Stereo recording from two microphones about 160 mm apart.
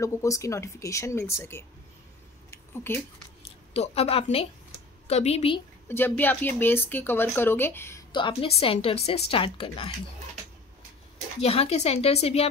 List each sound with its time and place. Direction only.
0.0 s a woman's voice: 20° left (ahead or behind)
2.5 s a sound: 15° left (ahead or behind)
3.7 s a woman's voice: 40° left (ahead or behind)
5.9 s a woman's voice: 15° left (ahead or behind)
8.1 s a woman's voice: 30° left (ahead or behind)
11.4 s a woman's voice: 40° left (ahead or behind)